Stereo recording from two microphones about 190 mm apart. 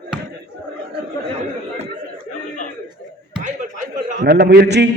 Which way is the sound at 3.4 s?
40° right (ahead or behind).